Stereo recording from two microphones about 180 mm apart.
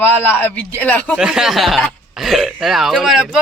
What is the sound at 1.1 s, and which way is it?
Speech, 5° right (ahead or behind).